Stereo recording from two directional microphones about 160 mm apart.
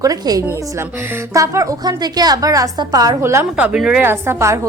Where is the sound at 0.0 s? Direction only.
20° right (ahead or behind).